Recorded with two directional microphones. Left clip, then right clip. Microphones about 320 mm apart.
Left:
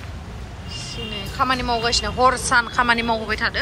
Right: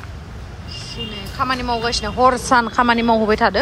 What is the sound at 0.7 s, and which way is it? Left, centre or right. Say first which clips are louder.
Speech: right 1 dB; centre.